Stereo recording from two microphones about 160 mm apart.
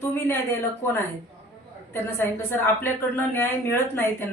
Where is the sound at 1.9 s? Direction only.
15° left (ahead or behind).